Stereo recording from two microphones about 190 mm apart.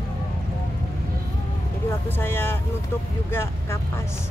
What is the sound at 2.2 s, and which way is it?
Speech, 10° left (ahead or behind).